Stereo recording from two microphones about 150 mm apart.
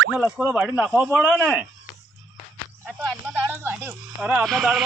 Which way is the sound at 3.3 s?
15° right (ahead or behind).